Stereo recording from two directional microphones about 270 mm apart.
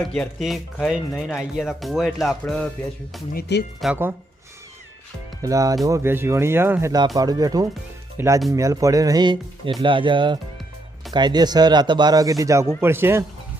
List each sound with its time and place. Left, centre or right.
0.0 s speech: centre
3.8 s speech: centre
5.4 s speech: centre